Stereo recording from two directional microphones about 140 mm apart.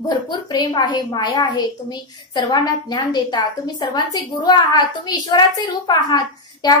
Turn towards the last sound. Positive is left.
turn(degrees=30)  # may be behind; listen again after turning